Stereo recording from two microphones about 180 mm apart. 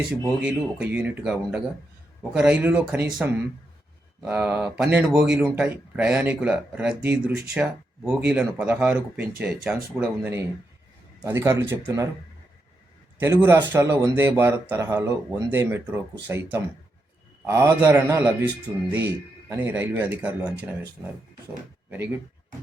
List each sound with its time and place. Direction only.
0.3 s speech: 5° right (ahead or behind)
13.1 s a man's voice: 15° right (ahead or behind)